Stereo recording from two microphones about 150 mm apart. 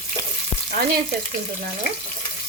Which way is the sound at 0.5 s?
45° left (ahead or behind).